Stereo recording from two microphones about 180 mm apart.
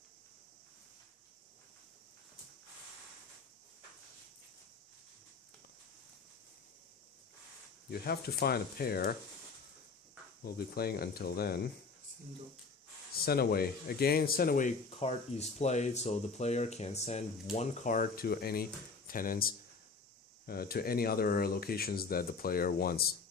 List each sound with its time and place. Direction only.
7.9 s speech: 60° left (ahead or behind)
10.4 s speech: 60° left (ahead or behind)
13.1 s speech: 60° left (ahead or behind)